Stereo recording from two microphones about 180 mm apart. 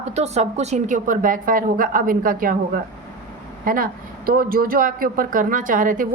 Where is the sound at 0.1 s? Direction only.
35° right (ahead or behind).